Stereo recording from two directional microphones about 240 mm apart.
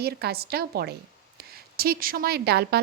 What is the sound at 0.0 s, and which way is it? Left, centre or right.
A woman's voice, right.